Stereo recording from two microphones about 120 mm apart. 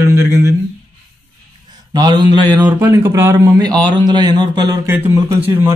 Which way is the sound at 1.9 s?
35° right (ahead or behind).